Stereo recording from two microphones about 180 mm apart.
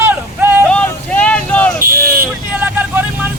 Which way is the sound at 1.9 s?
55° right (ahead or behind).